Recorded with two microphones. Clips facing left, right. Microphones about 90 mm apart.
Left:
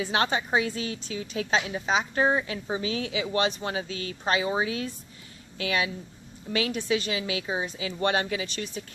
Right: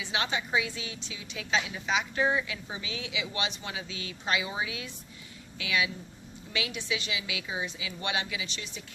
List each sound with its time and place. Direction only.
0.0 s a woman's voice: 45° left (ahead or behind)